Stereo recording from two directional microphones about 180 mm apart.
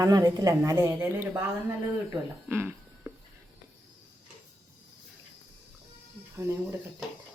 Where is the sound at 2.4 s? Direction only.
10° right (ahead or behind).